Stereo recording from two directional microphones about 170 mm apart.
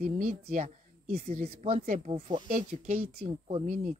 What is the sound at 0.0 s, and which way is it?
Speech, 60° right (ahead or behind).